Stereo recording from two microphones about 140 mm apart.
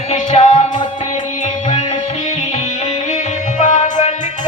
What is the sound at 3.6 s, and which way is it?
Music, 60° left (ahead or behind).